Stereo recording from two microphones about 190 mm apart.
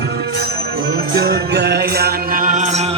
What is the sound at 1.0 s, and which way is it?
Music, 55° right (ahead or behind).